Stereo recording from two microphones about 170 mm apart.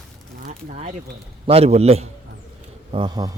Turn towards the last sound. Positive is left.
turn(degrees=-25)  # may be behind; listen again after turning